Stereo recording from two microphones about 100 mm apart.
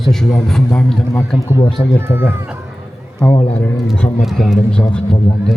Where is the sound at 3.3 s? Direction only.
85° left.